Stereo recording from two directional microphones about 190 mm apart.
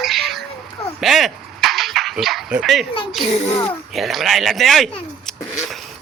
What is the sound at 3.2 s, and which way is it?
Speech, 35° left (ahead or behind).